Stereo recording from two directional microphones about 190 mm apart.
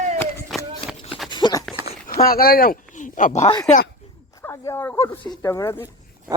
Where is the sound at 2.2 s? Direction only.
50° left (ahead or behind).